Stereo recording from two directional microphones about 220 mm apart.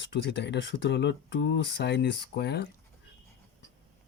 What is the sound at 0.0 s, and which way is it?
Speech, 55° left (ahead or behind).